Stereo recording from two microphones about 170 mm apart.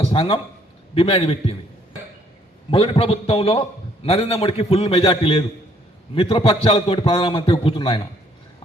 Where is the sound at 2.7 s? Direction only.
35° left (ahead or behind).